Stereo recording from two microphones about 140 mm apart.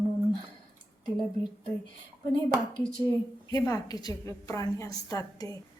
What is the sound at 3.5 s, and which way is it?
A woman's voice, 25° left (ahead or behind).